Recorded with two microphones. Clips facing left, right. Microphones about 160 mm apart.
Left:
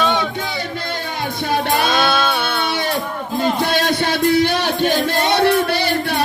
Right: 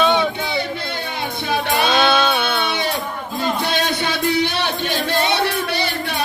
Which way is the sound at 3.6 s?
55° left (ahead or behind).